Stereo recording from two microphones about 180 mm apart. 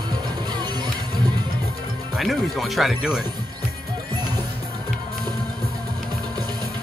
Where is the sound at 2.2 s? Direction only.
Centre (ahead or behind).